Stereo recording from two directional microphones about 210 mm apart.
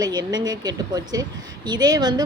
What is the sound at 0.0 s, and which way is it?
A woman's voice, 20° right (ahead or behind).